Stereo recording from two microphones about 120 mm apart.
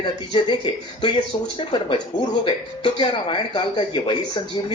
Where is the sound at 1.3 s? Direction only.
40° left (ahead or behind).